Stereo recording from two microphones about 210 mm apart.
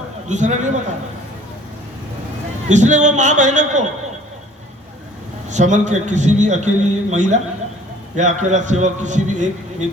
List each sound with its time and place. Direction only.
0.3 s a man's voice: 35° right (ahead or behind)
2.6 s a man's voice: 35° right (ahead or behind)
5.5 s a man's voice: 35° right (ahead or behind)